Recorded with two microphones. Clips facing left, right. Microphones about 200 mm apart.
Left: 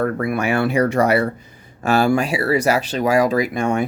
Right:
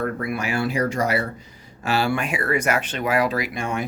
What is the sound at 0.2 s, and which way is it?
Speech, 55° left (ahead or behind).